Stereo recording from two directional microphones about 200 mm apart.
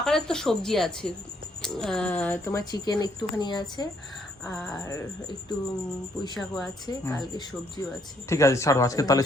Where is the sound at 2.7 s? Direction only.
20° left (ahead or behind).